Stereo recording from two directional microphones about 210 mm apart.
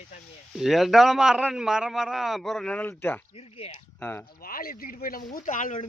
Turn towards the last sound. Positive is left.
turn(degrees=40)  # may be behind; listen again after turning